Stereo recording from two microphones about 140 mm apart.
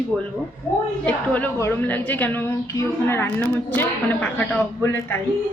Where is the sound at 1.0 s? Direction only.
10° left (ahead or behind).